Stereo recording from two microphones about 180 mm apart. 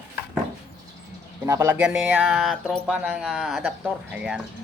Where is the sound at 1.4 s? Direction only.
15° right (ahead or behind).